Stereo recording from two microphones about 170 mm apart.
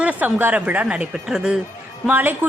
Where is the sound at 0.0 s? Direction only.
10° right (ahead or behind).